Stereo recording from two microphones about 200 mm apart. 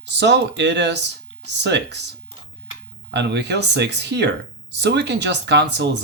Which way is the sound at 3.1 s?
60° right (ahead or behind).